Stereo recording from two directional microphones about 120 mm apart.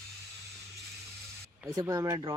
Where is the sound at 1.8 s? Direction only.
30° right (ahead or behind).